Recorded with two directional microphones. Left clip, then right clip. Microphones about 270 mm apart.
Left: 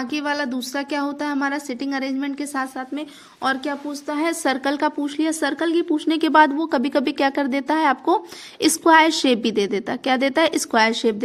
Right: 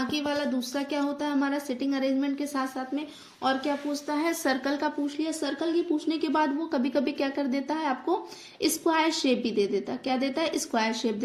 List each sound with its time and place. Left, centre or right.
0.1 s a woman's voice: left